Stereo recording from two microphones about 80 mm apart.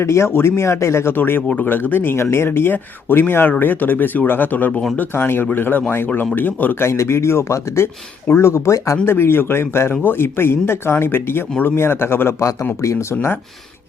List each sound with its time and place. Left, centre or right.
0.0 s speech: left